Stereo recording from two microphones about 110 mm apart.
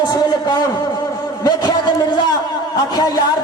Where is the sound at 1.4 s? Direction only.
40° left (ahead or behind).